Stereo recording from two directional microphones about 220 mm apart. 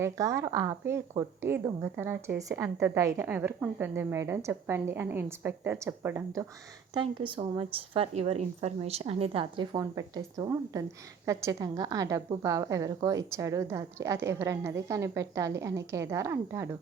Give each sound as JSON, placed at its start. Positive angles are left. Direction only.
{"t": 0.0, "sound": "a woman's voice", "side_deg": -15}
{"t": 6.9, "sound": "a woman's voice", "side_deg": -25}